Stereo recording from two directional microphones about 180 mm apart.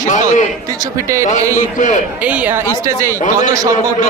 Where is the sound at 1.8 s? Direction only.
45° left (ahead or behind).